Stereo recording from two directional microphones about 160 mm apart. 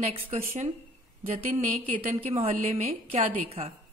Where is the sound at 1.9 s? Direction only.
35° right (ahead or behind).